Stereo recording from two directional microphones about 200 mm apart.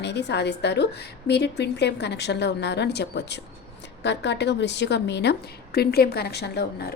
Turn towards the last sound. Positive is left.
turn(degrees=55)  # may be behind; listen again after turning